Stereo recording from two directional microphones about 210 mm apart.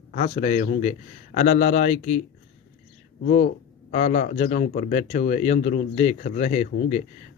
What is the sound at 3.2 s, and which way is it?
Speech, 40° left (ahead or behind).